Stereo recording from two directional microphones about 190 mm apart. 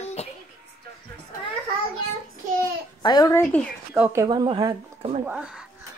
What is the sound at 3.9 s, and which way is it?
Speech, 10° right (ahead or behind).